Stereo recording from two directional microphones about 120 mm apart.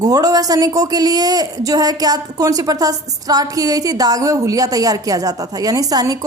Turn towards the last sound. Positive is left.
turn(degrees=-30)  # may be behind; listen again after turning